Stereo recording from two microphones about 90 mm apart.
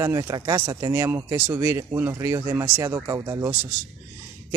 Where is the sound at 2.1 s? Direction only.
35° right (ahead or behind).